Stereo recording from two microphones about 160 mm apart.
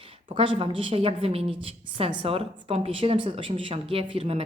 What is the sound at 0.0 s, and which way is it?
A woman's voice, 35° right (ahead or behind).